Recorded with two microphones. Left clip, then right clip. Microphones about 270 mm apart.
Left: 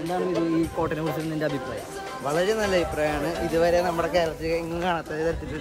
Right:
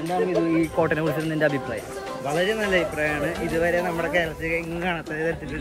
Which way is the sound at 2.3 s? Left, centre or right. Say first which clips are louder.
Right 1 dB; centre.